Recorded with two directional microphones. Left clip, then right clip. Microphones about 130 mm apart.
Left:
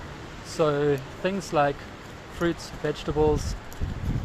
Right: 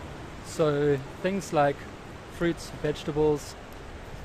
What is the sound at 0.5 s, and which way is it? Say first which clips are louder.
Speech: left 1 dB; 20° right (ahead or behind).